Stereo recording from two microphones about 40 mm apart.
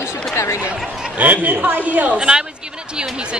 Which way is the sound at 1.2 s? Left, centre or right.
Right.